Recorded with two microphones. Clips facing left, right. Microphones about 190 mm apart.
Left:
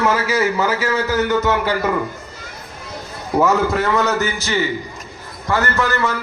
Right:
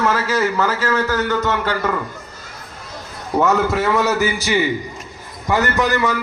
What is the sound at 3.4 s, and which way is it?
A man's voice, centre (ahead or behind).